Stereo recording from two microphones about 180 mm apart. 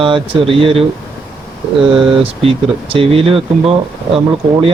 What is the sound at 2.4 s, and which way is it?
Speech, 30° right (ahead or behind).